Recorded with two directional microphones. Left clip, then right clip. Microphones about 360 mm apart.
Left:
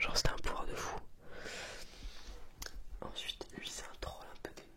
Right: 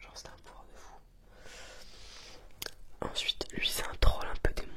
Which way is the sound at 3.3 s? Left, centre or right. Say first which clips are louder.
Right 11 dB; right.